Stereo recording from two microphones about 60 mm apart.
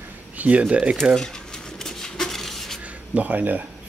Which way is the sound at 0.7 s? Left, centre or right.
Right.